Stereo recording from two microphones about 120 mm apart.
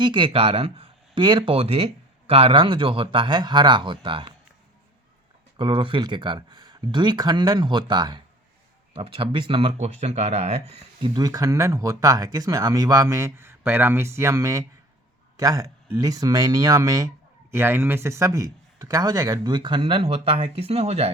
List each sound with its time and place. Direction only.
0.0 s speech: 40° right (ahead or behind)
5.5 s a man's voice: 45° right (ahead or behind)
8.9 s speech: 50° right (ahead or behind)
11.0 s a man's voice: 35° right (ahead or behind)
17.5 s a man's voice: 20° right (ahead or behind); by 21.1 s 60° right (ahead or behind)